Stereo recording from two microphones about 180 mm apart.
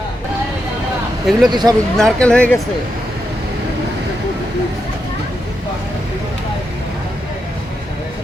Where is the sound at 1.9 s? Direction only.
5° left (ahead or behind).